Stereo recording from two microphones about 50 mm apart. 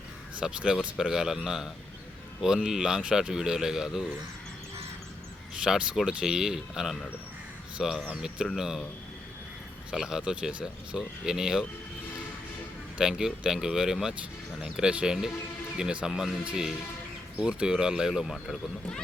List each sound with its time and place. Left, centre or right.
0.3 s speech: centre
5.6 s speech: centre
9.9 s speech: centre
13.0 s speech: centre
16.4 s speech: right; by 18.5 s centre